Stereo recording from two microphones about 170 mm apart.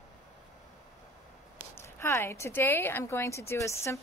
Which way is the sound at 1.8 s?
15° left (ahead or behind).